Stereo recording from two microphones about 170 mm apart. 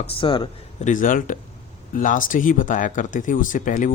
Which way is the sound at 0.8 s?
50° left (ahead or behind).